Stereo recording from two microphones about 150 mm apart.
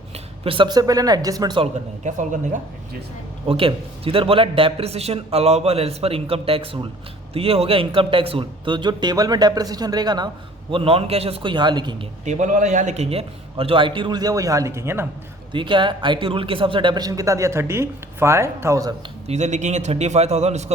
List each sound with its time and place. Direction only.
0.1 s speech: 35° right (ahead or behind)
1.6 s speech: 55° right (ahead or behind)
3.4 s a man's voice: 40° right (ahead or behind)
10.7 s a man's voice: 40° right (ahead or behind)
12.2 s a man's voice: 50° right (ahead or behind); by 15.0 s 15° right (ahead or behind)
15.5 s speech: 30° right (ahead or behind)
19.3 s a man's voice: 50° right (ahead or behind)